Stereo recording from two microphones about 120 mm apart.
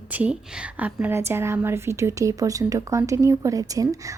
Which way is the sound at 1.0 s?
20° right (ahead or behind).